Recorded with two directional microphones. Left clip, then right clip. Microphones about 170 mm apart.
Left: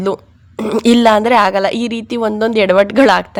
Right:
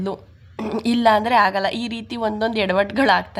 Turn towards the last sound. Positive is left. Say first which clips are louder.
# left 8 dB
turn(degrees=45)  # may be behind; listen again after turning